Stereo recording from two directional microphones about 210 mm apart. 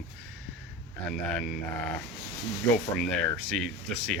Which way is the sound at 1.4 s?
5° left (ahead or behind).